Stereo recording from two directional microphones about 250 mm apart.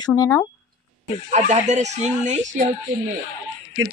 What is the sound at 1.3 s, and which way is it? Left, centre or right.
A man's voice, right.